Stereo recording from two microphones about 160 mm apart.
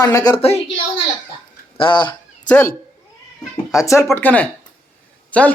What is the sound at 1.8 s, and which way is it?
Speech, 30° left (ahead or behind).